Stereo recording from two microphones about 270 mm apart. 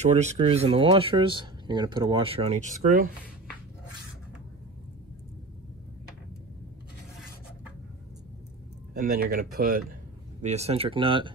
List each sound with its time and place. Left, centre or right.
0.0 s speech: right
8.9 s speech: right